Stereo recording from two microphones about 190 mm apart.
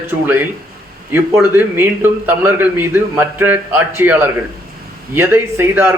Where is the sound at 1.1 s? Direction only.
10° right (ahead or behind).